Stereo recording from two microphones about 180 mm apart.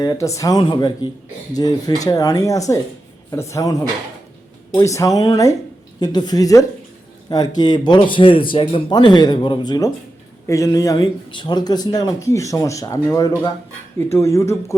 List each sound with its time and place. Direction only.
0.0 s speech: 20° left (ahead or behind)